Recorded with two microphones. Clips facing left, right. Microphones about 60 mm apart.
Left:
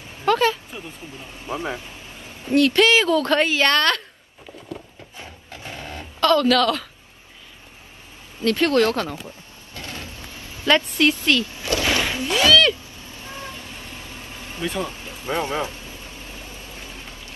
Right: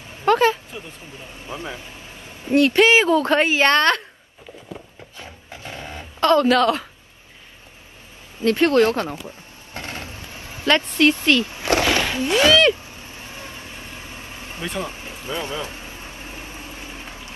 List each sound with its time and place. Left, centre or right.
0.2 s a sound: centre
2.5 s a woman's voice: right
5.7 s a sound: centre
6.2 s a woman's voice: right
8.4 s a woman's voice: centre
9.8 s vehicle: right
10.7 s a woman's voice: centre
11.6 s a sound: right
12.3 s speech: right
14.6 s a woman's voice: centre
15.2 s speech: left
15.7 s vehicle: right